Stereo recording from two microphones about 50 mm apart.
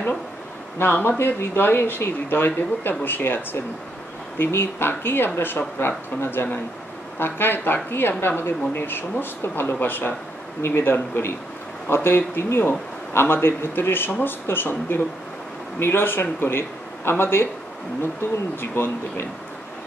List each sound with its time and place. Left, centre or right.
1.0 s speech: left
18.6 s speech: left